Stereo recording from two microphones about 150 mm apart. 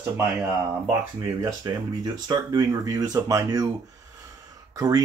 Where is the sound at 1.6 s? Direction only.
25° right (ahead or behind).